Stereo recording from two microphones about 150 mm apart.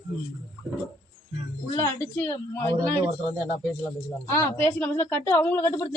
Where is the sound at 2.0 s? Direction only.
15° left (ahead or behind).